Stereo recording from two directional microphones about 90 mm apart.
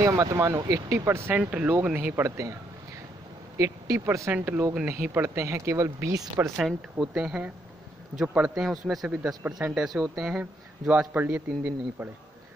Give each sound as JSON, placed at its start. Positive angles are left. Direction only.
{"t": 0.0, "sound": "speech", "side_deg": -35}
{"t": 1.3, "sound": "a man's voice", "side_deg": -15}
{"t": 3.5, "sound": "speech", "side_deg": -35}
{"t": 4.3, "sound": "speech", "side_deg": -20}
{"t": 6.5, "sound": "a man's voice", "side_deg": -5}
{"t": 9.8, "sound": "a man's voice", "side_deg": -15}